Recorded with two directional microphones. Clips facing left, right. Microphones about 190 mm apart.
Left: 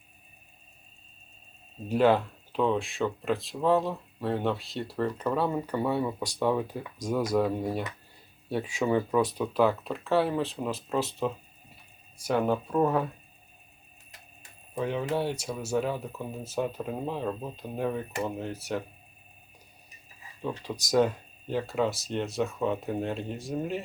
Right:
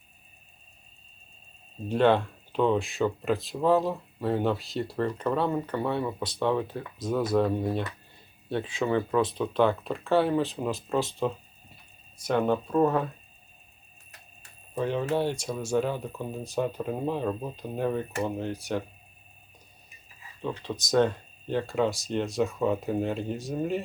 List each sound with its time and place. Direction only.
1.9 s speech: 5° left (ahead or behind)
14.8 s speech: centre (ahead or behind)
20.4 s speech: 10° left (ahead or behind)